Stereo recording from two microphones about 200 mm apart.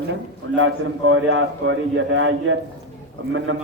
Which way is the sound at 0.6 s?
80° right.